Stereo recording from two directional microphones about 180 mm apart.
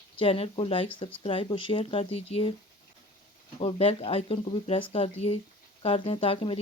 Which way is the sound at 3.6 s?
35° left (ahead or behind).